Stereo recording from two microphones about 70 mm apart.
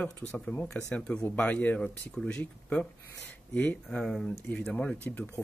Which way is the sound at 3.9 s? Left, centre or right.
Centre.